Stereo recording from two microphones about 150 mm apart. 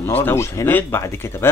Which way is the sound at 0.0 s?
15° left (ahead or behind).